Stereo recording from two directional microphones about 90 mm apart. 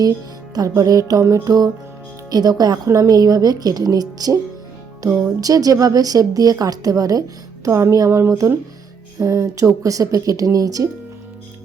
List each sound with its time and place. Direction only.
0.8 s a woman's voice: 45° right (ahead or behind)